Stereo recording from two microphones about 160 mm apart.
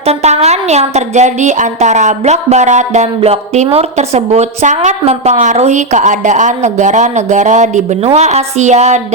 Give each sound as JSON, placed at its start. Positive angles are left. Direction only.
{"t": 0.0, "sound": "speech", "side_deg": -40}